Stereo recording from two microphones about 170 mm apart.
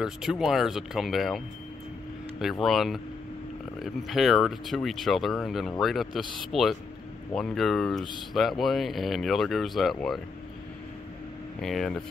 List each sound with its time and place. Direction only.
0.0 s speech: 5° right (ahead or behind)
2.6 s speech: centre (ahead or behind)
11.6 s speech: centre (ahead or behind)